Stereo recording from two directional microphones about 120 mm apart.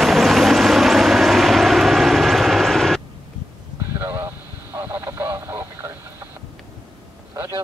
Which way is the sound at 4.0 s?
20° right (ahead or behind).